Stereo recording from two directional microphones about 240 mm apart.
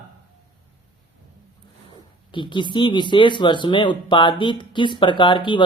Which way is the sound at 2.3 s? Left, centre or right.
Centre.